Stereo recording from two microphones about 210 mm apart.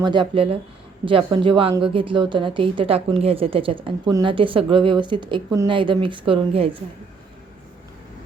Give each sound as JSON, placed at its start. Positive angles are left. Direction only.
{"t": 0.0, "sound": "a woman's voice", "side_deg": -20}